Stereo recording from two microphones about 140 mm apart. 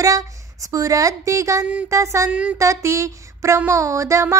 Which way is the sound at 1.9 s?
20° right (ahead or behind).